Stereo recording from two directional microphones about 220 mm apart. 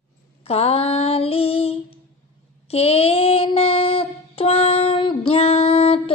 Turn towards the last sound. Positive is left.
turn(degrees=25)  # may be behind; listen again after turning